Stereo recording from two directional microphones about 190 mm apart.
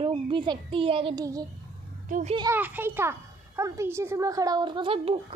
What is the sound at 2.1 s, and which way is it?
Speech, 45° right (ahead or behind).